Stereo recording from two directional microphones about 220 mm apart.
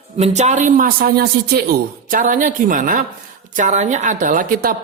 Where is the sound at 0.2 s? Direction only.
30° right (ahead or behind); by 1.6 s 45° right (ahead or behind).